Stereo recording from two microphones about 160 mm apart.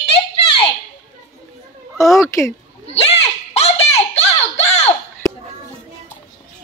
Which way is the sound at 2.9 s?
40° left (ahead or behind).